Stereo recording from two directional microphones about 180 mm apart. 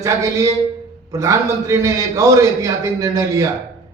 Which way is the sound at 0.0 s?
20° right (ahead or behind).